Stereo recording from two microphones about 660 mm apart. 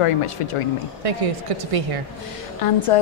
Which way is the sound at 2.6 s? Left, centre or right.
Left.